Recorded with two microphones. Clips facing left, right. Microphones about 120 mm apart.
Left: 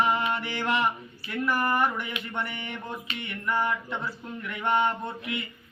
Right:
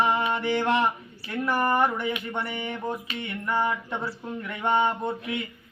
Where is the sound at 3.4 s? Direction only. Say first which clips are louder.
Right 1 dB; 30° right (ahead or behind).